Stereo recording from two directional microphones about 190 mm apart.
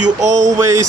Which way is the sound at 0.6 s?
15° right (ahead or behind).